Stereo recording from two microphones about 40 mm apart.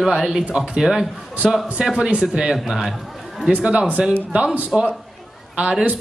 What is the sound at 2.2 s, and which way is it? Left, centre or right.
Speech, centre.